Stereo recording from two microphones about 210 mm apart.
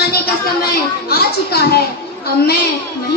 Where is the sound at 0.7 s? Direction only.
45° left (ahead or behind).